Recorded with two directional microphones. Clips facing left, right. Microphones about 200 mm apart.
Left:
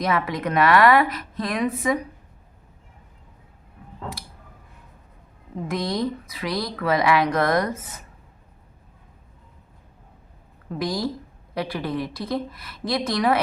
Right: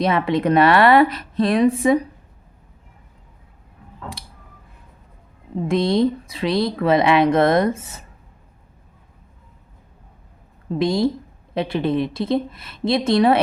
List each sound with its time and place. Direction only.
0.0 s speech: 30° right (ahead or behind)
5.6 s speech: 25° right (ahead or behind)
10.7 s speech: 25° right (ahead or behind)